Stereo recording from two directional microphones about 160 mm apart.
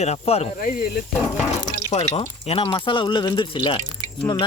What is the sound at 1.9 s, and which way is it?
Speech, 45° left (ahead or behind).